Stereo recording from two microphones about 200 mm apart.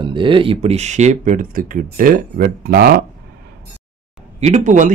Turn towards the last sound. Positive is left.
turn(degrees=-40)  # may be behind; listen again after turning